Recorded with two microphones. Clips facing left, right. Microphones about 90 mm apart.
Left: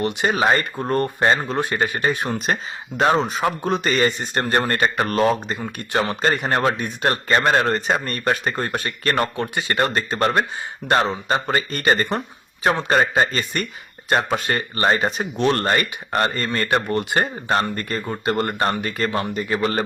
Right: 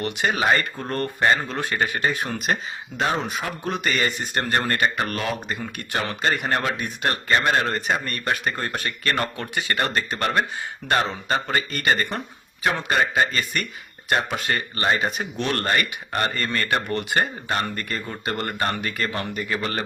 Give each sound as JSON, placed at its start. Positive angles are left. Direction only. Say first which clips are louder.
{"t": 0.0, "sound": "speech", "louder": "left 3 dB", "side_deg": 20}
{"t": 5.5, "sound": "speech", "louder": "left 5 dB", "side_deg": 25}
{"t": 14.8, "sound": "speech", "louder": "left 4 dB", "side_deg": 40}